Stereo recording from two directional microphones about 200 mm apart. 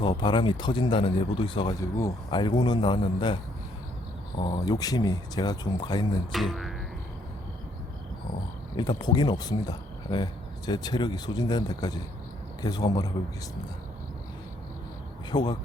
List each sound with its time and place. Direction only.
0.0 s speech: 25° left (ahead or behind)
4.4 s speech: 20° left (ahead or behind)
6.3 s music: centre (ahead or behind)
8.7 s speech: 20° left (ahead or behind)
15.3 s speech: 20° left (ahead or behind)